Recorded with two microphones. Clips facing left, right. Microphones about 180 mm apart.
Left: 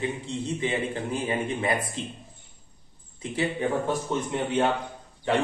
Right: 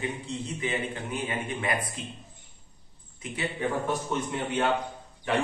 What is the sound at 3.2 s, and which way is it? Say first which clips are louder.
Speech: left 5 dB; 30° left (ahead or behind).